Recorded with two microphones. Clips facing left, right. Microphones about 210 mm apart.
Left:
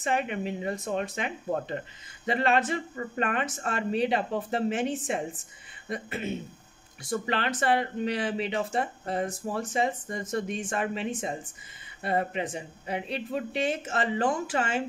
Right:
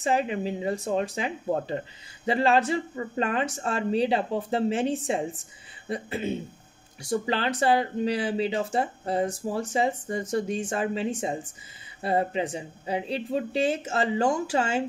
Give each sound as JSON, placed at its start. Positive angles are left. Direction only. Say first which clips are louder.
{"t": 0.0, "sound": "speech", "louder": "right 3 dB", "side_deg": -30}